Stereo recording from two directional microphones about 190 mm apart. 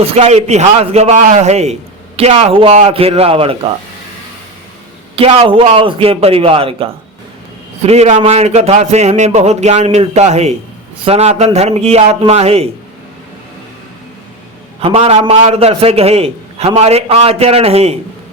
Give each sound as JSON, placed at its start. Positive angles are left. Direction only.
{"t": 0.0, "sound": "a man's voice", "side_deg": -30}
{"t": 5.1, "sound": "a man's voice", "side_deg": -30}
{"t": 14.8, "sound": "a man's voice", "side_deg": -30}